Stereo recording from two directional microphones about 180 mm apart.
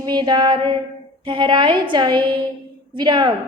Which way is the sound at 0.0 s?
25° right (ahead or behind).